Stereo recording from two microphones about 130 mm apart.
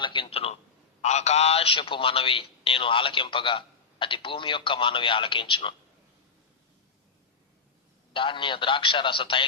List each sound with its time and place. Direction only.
0.0 s a man's voice: 40° left (ahead or behind)
8.1 s a man's voice: 40° left (ahead or behind)